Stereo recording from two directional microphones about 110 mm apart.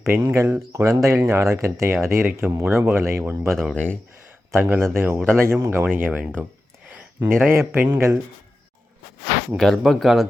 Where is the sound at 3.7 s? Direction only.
15° left (ahead or behind).